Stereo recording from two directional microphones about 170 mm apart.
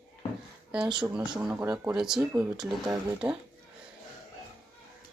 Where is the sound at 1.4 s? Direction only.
5° right (ahead or behind).